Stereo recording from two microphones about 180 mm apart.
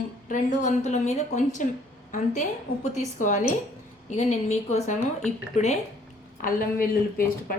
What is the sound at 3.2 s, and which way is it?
A woman's voice, 45° left (ahead or behind).